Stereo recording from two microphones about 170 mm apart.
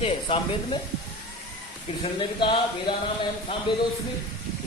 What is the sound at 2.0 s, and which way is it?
Speech, 30° left (ahead or behind).